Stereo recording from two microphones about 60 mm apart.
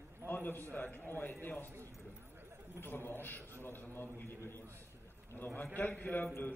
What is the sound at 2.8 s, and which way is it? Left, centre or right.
A man's voice, left.